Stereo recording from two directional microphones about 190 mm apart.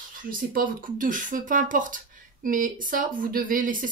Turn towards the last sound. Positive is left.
turn(degrees=-45)  # may be behind; listen again after turning